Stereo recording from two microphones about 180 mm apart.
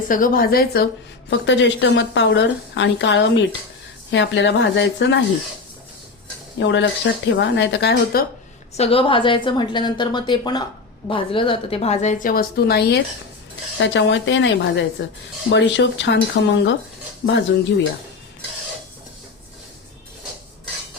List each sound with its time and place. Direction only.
0.1 s a woman's voice: 50° left (ahead or behind)
1.3 s a woman's voice: 90° left
6.6 s a woman's voice: 90° left; by 8.2 s 70° left (ahead or behind)
8.7 s a woman's voice: 35° left (ahead or behind); by 13.0 s 65° left (ahead or behind)
13.7 s a woman's voice: 90° left
17.2 s speech: 90° left